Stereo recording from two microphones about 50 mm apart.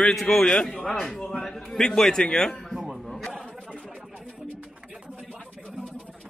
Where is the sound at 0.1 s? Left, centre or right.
Centre.